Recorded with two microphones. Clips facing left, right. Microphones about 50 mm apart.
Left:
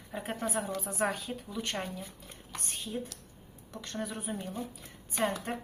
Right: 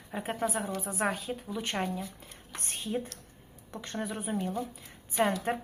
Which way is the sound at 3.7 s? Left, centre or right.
Centre.